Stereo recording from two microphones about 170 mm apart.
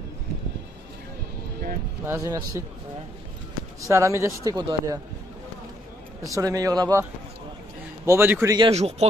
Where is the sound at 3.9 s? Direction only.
15° right (ahead or behind).